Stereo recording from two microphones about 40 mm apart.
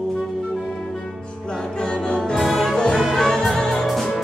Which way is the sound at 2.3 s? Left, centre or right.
Centre.